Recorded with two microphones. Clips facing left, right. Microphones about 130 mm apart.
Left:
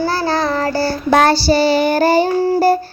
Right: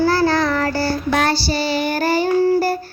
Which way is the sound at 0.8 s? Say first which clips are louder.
Left 5 dB; 35° left (ahead or behind).